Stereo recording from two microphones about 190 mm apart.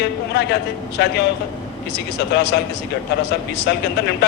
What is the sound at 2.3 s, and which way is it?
Speech, 60° left (ahead or behind).